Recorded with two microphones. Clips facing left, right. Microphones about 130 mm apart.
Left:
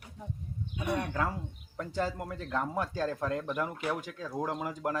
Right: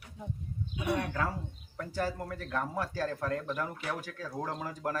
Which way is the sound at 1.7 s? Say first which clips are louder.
Left 1 dB; 20° left (ahead or behind).